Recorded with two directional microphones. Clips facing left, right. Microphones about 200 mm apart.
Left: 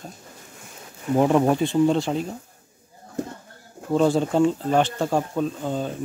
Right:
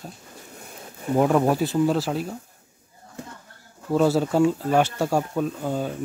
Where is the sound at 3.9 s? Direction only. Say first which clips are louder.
Even; 5° right (ahead or behind).